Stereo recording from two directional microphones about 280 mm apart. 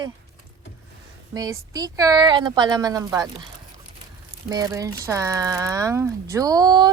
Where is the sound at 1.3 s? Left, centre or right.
Centre.